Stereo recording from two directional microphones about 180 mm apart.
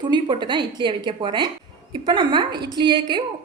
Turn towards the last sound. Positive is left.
turn(degrees=-25)  # may be behind; listen again after turning